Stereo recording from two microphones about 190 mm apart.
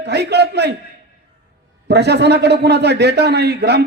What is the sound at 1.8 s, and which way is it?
A man's voice, 60° right (ahead or behind).